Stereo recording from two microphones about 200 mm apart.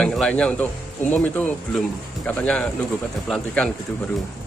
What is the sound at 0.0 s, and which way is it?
A man's voice, centre (ahead or behind).